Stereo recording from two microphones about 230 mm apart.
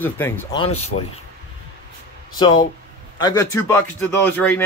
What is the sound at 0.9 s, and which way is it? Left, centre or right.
Speech, left.